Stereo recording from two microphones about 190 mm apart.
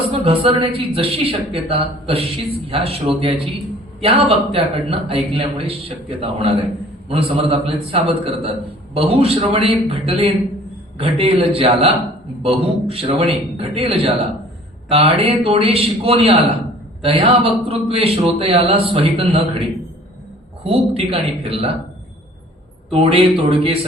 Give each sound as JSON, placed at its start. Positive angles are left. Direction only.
{"t": 0.1, "sound": "speech", "side_deg": -30}
{"t": 20.7, "sound": "a man's voice", "side_deg": -30}
{"t": 22.9, "sound": "a man's voice", "side_deg": -30}